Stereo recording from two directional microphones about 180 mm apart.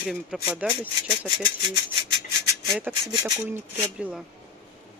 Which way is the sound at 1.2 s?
25° right (ahead or behind).